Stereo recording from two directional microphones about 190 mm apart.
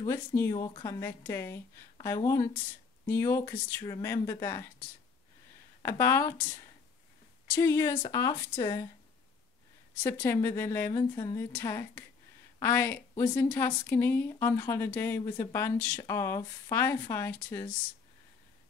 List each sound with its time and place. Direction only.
0.0 s speech: 15° left (ahead or behind)
5.8 s speech: 15° left (ahead or behind)
7.5 s speech: 15° left (ahead or behind)
10.0 s speech: 15° left (ahead or behind)